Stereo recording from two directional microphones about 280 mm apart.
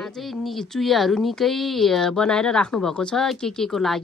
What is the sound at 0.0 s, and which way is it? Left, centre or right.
Speech, centre.